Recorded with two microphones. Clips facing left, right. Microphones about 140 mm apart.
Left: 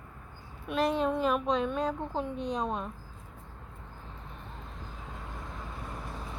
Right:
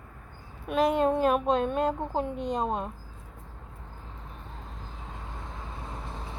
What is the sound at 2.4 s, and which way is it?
Speech, 50° right (ahead or behind).